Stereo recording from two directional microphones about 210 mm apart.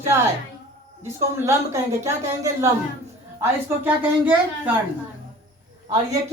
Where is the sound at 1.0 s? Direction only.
15° right (ahead or behind).